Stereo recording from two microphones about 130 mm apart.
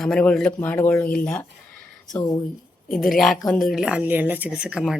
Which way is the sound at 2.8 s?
Centre (ahead or behind).